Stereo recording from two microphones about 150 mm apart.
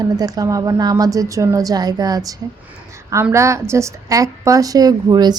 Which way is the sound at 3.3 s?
20° right (ahead or behind).